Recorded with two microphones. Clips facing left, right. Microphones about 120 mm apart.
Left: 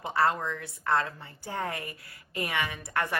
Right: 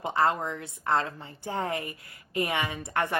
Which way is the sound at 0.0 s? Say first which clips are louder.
Right 1 dB; 20° right (ahead or behind).